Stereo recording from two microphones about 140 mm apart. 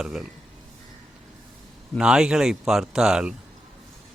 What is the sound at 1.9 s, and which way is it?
Speech, 5° right (ahead or behind).